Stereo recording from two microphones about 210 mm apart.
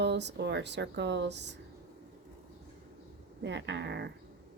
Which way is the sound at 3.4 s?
55° right (ahead or behind).